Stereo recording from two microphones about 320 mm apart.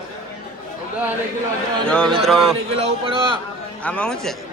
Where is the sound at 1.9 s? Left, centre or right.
Centre.